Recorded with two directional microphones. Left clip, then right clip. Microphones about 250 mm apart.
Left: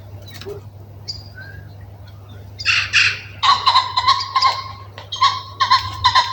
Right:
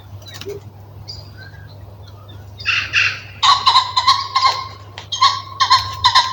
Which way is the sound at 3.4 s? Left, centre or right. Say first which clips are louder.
Right 2 dB; right.